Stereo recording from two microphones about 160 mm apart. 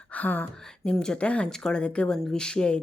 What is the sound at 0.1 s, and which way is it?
Gasp, 10° left (ahead or behind).